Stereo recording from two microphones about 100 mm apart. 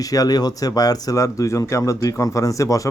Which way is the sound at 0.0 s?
35° left (ahead or behind).